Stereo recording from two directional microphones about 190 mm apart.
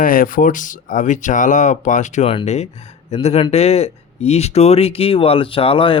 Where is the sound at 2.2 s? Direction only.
25° left (ahead or behind).